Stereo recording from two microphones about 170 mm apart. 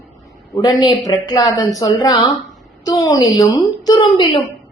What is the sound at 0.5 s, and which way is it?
Speech, 20° left (ahead or behind).